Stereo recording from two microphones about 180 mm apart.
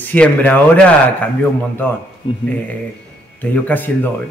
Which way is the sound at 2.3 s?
30° left (ahead or behind).